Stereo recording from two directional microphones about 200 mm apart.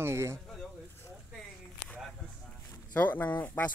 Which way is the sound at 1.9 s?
Centre (ahead or behind).